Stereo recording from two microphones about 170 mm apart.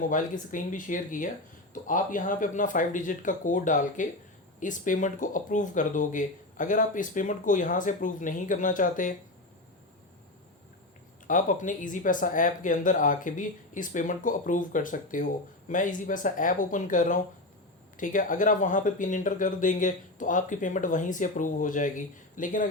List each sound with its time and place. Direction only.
0.0 s speech: 50° left (ahead or behind)
11.3 s speech: 50° left (ahead or behind)